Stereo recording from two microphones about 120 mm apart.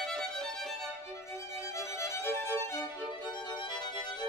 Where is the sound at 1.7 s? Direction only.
25° left (ahead or behind).